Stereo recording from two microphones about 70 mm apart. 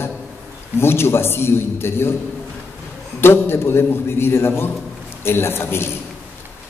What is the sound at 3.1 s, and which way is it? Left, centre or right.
A man's voice, left.